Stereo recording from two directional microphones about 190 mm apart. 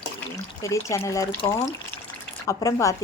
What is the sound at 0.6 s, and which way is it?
Speech, 15° left (ahead or behind).